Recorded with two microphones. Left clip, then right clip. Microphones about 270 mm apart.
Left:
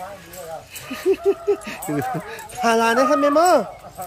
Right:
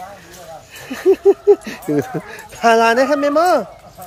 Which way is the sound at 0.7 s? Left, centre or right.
Centre.